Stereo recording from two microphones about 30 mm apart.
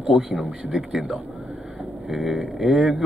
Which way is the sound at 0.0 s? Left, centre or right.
Right.